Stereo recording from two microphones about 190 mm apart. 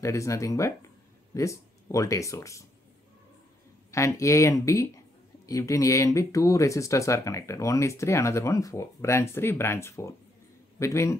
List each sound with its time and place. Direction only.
0.0 s speech: 15° left (ahead or behind)
3.9 s speech: 15° left (ahead or behind)